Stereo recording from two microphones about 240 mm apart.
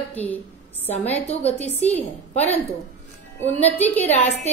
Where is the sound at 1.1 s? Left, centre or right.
Left.